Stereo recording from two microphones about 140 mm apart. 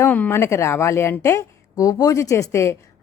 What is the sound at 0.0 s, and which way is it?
A woman's voice, 15° left (ahead or behind).